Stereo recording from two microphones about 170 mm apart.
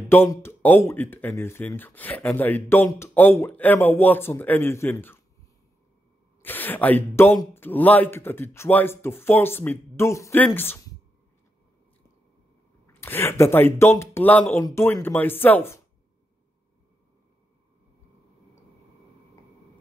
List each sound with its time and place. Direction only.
0.1 s speech: 15° left (ahead or behind)
6.4 s speech: 10° left (ahead or behind)
12.8 s speech: 15° left (ahead or behind)